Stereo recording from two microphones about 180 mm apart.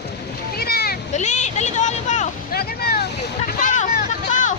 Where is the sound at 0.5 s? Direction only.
60° left (ahead or behind).